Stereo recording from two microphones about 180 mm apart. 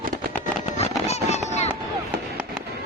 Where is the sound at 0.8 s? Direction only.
35° left (ahead or behind).